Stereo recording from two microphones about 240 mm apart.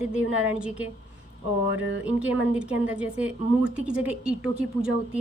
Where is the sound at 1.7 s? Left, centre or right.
Right.